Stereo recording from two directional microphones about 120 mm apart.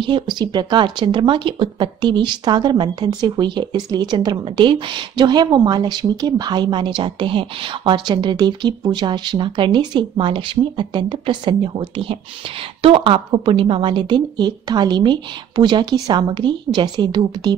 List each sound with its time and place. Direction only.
0.0 s speech: 40° right (ahead or behind)